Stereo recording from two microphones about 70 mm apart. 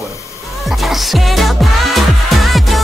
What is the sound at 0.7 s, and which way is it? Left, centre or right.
Music, centre.